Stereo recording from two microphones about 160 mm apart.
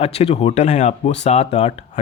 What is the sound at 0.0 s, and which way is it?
Speech, 40° left (ahead or behind).